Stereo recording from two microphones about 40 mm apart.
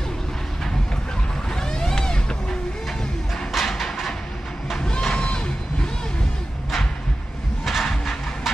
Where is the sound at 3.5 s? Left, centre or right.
Centre.